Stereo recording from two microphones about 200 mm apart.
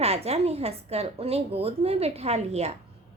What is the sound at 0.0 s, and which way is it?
A woman's voice, 30° right (ahead or behind).